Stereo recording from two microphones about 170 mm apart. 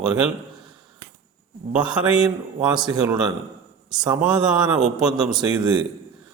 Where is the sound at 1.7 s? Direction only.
5° right (ahead or behind).